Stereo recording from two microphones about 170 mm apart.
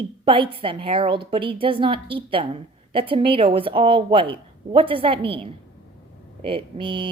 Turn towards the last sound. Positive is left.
turn(degrees=-30)  # may be behind; listen again after turning